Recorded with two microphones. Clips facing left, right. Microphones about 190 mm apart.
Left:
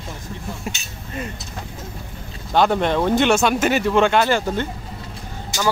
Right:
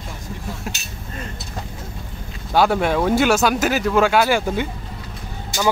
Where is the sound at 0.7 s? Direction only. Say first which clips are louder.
Left 3 dB; centre (ahead or behind).